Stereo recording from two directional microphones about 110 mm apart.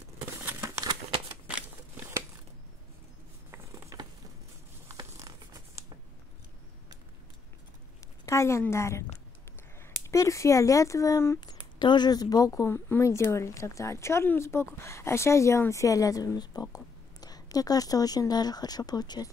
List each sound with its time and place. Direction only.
0.6 s a sound: 30° right (ahead or behind)
3.5 s mechanisms: 35° right (ahead or behind)
4.9 s tearing: 30° right (ahead or behind)
8.3 s speech: 25° left (ahead or behind)
10.0 s speech: 30° left (ahead or behind)
11.4 s speech: 40° left (ahead or behind)